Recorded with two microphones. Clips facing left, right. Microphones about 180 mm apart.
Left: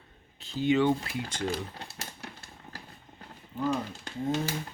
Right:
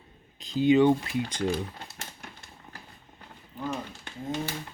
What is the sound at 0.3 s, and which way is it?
Speech, 15° right (ahead or behind).